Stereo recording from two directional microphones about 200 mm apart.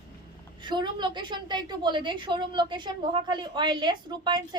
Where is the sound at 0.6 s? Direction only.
20° right (ahead or behind).